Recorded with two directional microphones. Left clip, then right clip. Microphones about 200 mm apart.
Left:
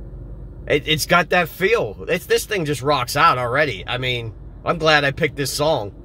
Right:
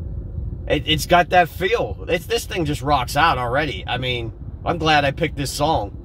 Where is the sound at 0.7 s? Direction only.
25° left (ahead or behind).